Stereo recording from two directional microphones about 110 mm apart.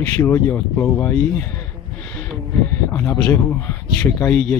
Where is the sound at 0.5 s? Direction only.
20° left (ahead or behind).